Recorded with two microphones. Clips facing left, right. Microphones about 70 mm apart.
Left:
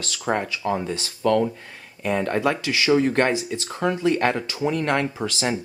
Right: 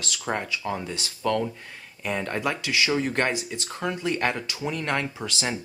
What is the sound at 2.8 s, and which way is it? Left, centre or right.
Speech, left.